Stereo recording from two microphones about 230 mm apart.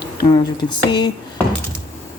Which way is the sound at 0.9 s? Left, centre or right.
Centre.